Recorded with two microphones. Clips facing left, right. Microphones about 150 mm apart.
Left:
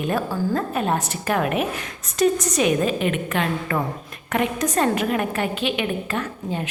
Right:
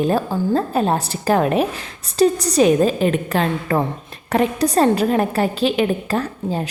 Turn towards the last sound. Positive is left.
turn(degrees=-35)  # may be behind; listen again after turning